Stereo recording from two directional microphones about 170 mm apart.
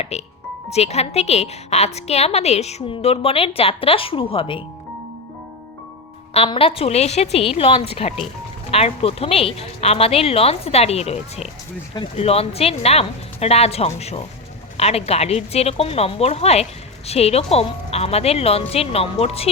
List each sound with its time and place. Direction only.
0.1 s a woman's voice: 40° left (ahead or behind)
6.3 s a woman's voice: 35° left (ahead or behind)